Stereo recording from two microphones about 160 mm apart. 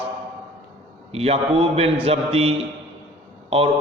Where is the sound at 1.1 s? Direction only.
40° right (ahead or behind).